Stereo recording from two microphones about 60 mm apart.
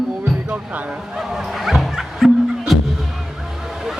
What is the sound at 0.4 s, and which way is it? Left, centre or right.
Music, right.